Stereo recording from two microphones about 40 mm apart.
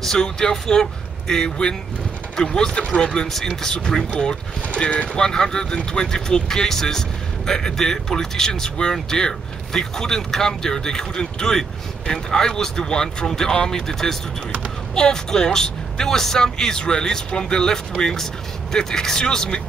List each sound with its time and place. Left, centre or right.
0.0 s speech: centre
3.3 s speech: centre; by 5.2 s left
5.2 s speech: centre